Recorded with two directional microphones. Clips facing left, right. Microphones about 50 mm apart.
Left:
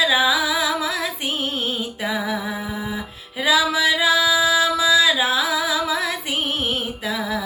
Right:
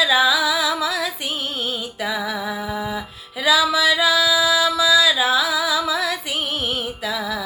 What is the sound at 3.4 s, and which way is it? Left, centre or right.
Music, left.